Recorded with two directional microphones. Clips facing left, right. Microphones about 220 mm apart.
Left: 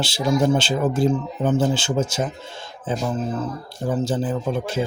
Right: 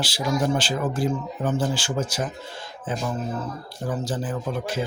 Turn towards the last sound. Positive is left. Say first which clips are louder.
# left 4 dB
turn(degrees=25)  # may be behind; listen again after turning